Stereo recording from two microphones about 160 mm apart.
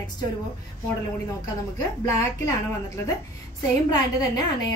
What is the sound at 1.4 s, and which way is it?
A woman's voice, 20° left (ahead or behind).